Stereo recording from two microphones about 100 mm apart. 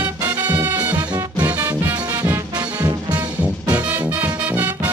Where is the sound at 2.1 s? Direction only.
35° right (ahead or behind).